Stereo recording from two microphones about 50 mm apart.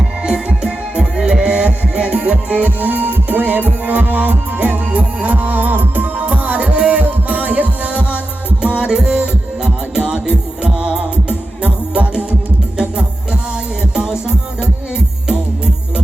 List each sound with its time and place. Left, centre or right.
0.4 s music: centre
2.6 s music: right